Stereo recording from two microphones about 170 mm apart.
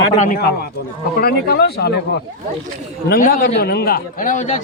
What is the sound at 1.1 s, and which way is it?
Speech, 65° left (ahead or behind).